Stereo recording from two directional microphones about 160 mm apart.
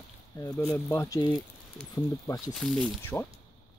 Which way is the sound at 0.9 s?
20° left (ahead or behind).